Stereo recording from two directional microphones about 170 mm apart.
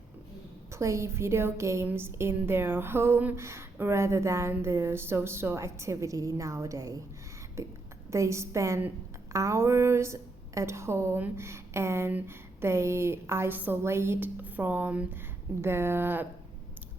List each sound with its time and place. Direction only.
0.7 s a woman's voice: 15° right (ahead or behind)